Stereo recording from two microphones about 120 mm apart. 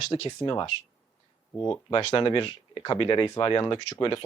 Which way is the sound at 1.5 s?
15° left (ahead or behind).